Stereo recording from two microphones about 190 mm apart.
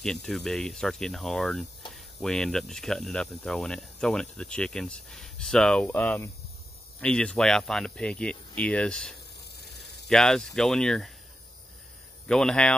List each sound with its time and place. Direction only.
0.0 s speech: centre (ahead or behind)
9.4 s ratchet: 60° left (ahead or behind)
10.0 s speech: 5° left (ahead or behind)
12.3 s speech: 5° left (ahead or behind)